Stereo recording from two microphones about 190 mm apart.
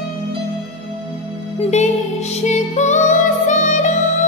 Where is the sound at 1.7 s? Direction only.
35° left (ahead or behind).